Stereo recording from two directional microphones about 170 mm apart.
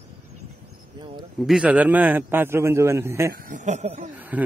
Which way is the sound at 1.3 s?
Centre (ahead or behind).